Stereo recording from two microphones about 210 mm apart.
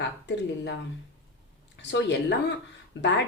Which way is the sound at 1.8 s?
55° left (ahead or behind).